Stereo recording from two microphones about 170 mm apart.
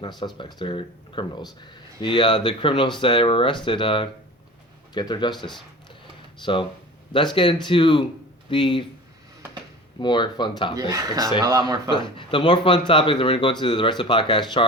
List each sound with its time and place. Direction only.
0.3 s speech: 30° left (ahead or behind)
5.3 s speech: centre (ahead or behind)
6.4 s speech: 30° left (ahead or behind)
10.0 s speech: 25° left (ahead or behind)
10.8 s speech: 20° right (ahead or behind)
11.9 s speech: 30° left (ahead or behind)